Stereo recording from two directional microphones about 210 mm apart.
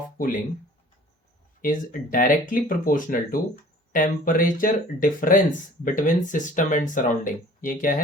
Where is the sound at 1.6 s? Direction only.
40° left (ahead or behind).